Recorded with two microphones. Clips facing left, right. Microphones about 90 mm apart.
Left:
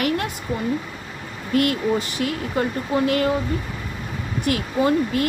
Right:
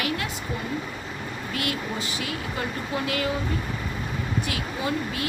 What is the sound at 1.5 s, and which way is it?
Speech, 45° left (ahead or behind).